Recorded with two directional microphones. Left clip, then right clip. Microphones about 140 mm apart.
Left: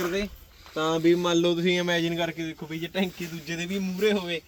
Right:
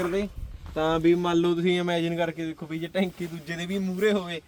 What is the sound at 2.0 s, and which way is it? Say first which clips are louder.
A man's voice: even; 30° right (ahead or behind).